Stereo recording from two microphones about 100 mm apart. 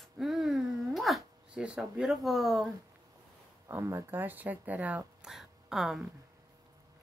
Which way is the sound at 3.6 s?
30° right (ahead or behind).